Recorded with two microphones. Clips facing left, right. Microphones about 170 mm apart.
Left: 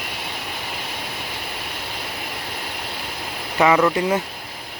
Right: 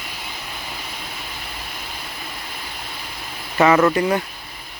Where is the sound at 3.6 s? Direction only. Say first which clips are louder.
Right 2 dB; 15° left (ahead or behind).